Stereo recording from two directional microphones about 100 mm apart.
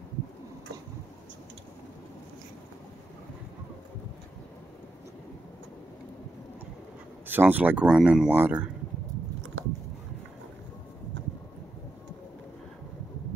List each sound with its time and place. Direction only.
7.2 s speech: 20° right (ahead or behind)